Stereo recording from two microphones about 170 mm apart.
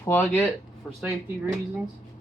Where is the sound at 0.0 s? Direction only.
10° left (ahead or behind).